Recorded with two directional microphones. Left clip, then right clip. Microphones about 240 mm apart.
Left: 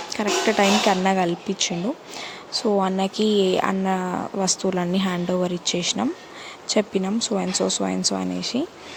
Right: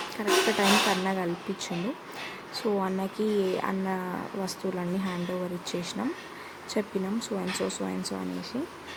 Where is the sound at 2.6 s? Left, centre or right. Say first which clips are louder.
Left 8 dB; left.